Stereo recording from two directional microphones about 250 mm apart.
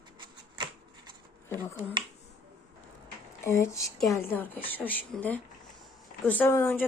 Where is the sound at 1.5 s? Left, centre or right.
Centre.